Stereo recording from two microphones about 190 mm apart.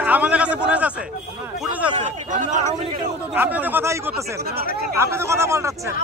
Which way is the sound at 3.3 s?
10° right (ahead or behind).